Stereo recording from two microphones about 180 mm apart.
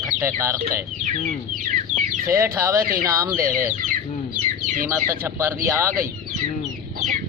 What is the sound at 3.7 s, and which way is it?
Chicken, 45° right (ahead or behind).